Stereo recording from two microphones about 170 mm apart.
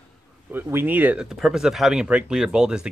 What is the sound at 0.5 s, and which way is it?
Speech, 10° right (ahead or behind).